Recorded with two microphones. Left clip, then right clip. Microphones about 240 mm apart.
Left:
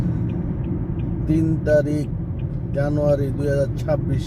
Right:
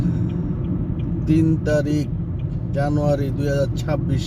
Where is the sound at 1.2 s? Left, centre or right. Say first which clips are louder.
Even; centre.